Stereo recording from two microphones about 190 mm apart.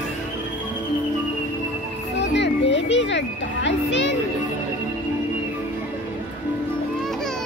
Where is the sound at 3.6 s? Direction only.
70° left (ahead or behind).